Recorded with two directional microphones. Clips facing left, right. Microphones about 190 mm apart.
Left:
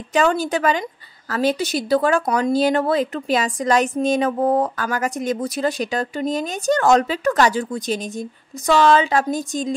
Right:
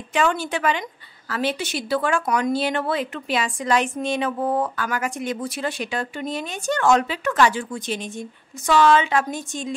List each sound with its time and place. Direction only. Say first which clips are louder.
0.1 s speech: left 4 dB; 40° left (ahead or behind)